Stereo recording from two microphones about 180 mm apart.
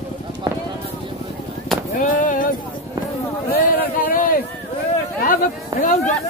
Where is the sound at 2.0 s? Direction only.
50° left (ahead or behind).